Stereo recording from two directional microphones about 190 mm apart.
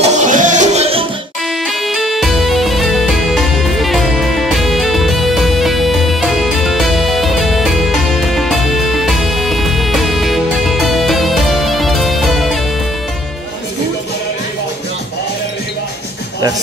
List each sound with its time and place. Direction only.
0.0 s music: 40° right (ahead or behind)
1.7 s music: centre (ahead or behind)